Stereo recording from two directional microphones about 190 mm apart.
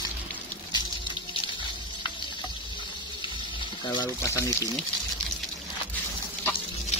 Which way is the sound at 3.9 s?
20° left (ahead or behind).